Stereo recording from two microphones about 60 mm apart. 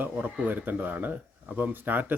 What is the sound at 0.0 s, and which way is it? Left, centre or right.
Speech, right.